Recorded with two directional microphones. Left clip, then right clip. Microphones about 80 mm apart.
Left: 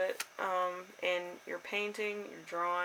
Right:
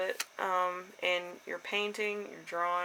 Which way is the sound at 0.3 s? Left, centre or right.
Right.